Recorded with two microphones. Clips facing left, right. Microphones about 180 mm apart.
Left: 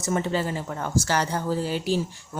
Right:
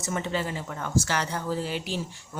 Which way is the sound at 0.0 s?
40° left (ahead or behind).